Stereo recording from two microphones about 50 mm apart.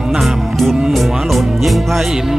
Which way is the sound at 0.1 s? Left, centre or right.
Centre.